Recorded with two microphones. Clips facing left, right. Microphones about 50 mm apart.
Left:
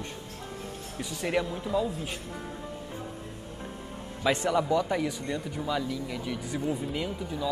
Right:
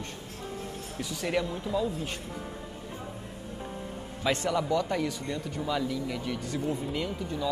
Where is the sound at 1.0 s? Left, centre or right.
Centre.